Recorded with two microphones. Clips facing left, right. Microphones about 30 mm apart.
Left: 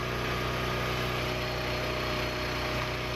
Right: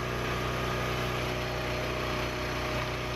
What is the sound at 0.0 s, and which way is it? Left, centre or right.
Vehicle, centre.